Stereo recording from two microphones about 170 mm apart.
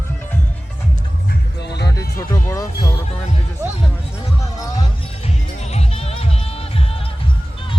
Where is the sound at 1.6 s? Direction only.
80° left.